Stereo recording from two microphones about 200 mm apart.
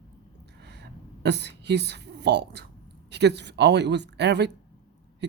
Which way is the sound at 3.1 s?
55° right (ahead or behind).